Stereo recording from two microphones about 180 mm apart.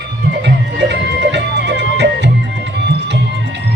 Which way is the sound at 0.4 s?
75° right (ahead or behind).